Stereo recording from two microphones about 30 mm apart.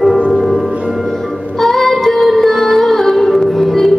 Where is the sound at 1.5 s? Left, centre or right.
Centre.